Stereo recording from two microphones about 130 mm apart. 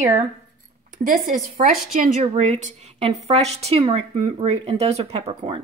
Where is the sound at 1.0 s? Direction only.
90° right.